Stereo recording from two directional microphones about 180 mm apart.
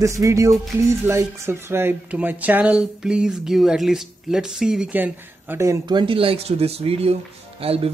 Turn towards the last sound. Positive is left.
turn(degrees=-30)  # may be behind; listen again after turning